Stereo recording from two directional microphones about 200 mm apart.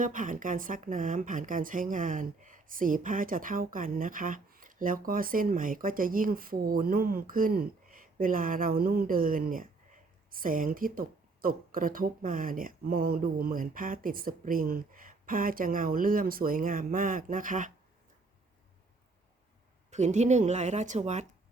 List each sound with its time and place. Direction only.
0.0 s a woman's voice: 40° right (ahead or behind)
19.9 s speech: 35° right (ahead or behind)